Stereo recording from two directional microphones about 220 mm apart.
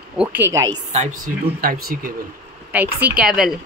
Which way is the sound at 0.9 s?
30° right (ahead or behind).